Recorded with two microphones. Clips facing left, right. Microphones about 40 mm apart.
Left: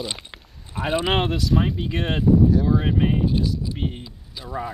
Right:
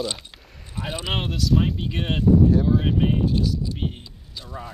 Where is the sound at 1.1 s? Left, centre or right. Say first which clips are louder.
Left 2 dB; centre.